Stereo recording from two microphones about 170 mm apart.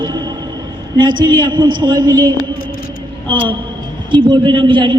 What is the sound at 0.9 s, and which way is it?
A man's voice, 25° right (ahead or behind).